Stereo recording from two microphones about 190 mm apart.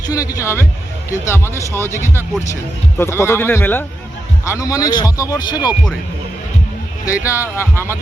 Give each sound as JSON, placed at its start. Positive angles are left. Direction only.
{"t": 0.1, "sound": "a man's voice", "side_deg": 20}
{"t": 7.0, "sound": "speech", "side_deg": 15}